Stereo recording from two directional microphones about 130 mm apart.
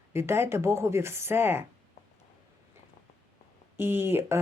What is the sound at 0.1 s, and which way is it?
Speech, 20° right (ahead or behind).